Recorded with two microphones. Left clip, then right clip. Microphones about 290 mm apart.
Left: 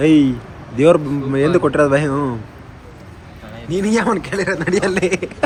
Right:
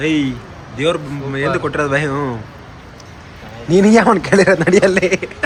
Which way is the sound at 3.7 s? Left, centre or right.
Centre.